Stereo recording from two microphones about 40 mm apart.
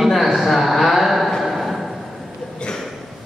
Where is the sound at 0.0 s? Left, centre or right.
Centre.